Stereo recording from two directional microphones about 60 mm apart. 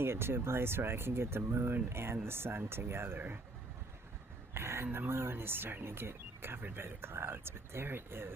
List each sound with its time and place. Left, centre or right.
0.0 s speech: right
4.5 s speech: right